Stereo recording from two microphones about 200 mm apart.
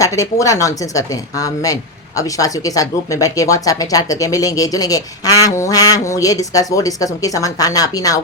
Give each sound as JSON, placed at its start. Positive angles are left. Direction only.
{"t": 0.0, "sound": "speech", "side_deg": 15}